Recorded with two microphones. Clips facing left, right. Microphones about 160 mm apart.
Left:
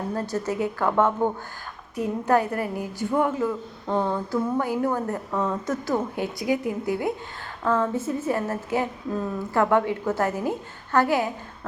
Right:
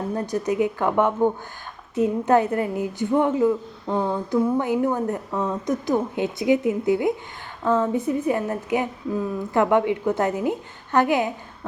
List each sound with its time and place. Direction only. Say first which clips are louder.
0.1 s a woman's voice: right 4 dB; 15° right (ahead or behind)